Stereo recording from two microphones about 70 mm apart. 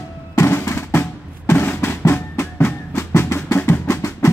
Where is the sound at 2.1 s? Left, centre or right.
Left.